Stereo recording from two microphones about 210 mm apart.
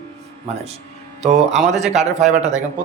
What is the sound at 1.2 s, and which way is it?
Speech, 35° right (ahead or behind).